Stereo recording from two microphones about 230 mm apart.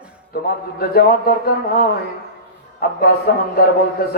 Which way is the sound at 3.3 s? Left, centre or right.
Left.